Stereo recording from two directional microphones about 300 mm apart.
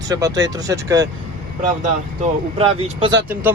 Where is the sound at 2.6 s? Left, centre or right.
Centre.